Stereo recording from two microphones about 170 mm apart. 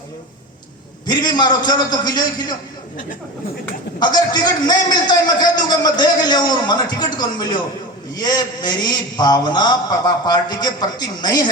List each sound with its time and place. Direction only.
1.0 s a man's voice: 25° left (ahead or behind)
4.0 s a man's voice: 25° left (ahead or behind)